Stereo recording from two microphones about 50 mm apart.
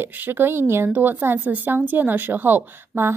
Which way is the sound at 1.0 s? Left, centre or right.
Right.